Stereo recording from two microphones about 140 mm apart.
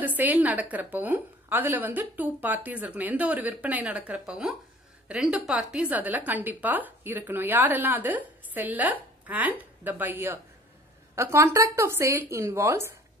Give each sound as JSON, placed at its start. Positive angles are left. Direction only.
{"t": 0.0, "sound": "a woman's voice", "side_deg": -10}